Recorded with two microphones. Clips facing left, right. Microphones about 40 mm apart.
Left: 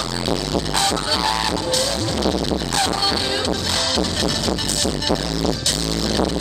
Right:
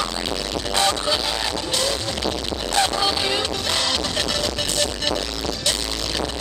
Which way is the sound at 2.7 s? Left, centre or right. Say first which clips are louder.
Right 3 dB; centre.